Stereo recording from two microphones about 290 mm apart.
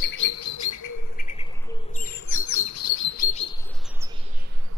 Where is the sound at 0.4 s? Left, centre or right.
Left.